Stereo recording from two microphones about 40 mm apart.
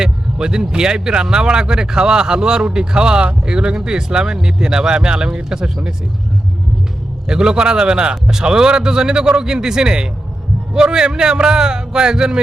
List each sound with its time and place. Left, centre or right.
0.0 s speech: centre
7.3 s speech: right